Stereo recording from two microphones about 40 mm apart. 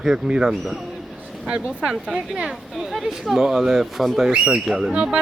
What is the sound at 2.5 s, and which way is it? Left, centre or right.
Speech, centre.